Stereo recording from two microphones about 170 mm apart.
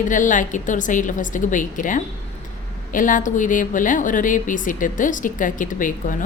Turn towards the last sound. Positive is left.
turn(degrees=50)  # may be behind; listen again after turning